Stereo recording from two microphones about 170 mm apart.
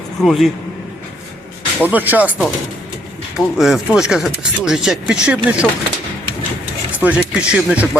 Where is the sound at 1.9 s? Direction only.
10° right (ahead or behind).